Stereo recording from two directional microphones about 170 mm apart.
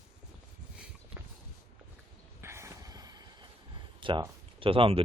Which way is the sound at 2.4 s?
15° right (ahead or behind).